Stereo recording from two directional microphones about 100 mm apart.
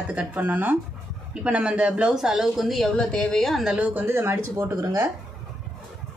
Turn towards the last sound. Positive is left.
turn(degrees=-30)  # may be behind; listen again after turning